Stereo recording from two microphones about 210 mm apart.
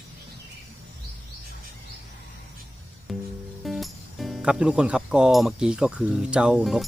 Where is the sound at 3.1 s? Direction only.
Centre (ahead or behind).